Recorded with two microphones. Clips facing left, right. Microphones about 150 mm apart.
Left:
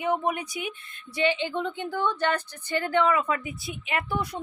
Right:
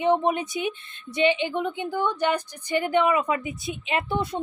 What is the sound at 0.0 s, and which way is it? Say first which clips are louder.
A woman's voice: right 5 dB; 25° right (ahead or behind).